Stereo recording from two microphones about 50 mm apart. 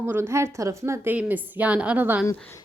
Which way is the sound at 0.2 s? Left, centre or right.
Right.